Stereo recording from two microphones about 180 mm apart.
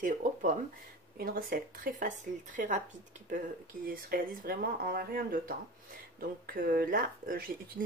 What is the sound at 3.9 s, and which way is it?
Speech, 50° right (ahead or behind).